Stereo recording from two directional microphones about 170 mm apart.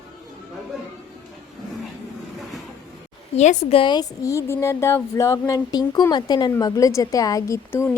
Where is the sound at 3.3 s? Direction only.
45° left (ahead or behind).